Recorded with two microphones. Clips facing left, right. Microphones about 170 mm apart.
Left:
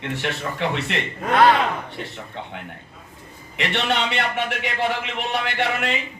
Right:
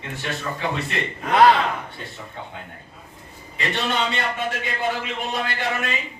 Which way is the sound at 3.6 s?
75° left (ahead or behind).